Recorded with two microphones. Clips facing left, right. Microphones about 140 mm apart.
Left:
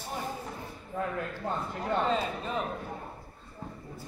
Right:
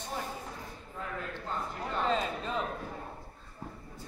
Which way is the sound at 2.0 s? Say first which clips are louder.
Left 1 dB; 5° left (ahead or behind).